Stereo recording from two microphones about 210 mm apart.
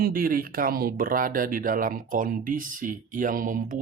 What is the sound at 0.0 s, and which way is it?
Speech, 45° right (ahead or behind).